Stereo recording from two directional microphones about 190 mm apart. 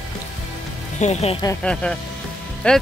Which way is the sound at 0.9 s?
35° left (ahead or behind).